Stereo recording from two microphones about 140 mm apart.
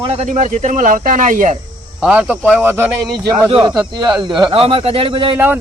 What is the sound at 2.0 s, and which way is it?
Speech, 10° right (ahead or behind).